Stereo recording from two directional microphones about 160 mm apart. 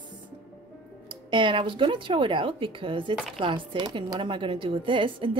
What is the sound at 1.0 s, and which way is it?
A woman's voice, 30° right (ahead or behind).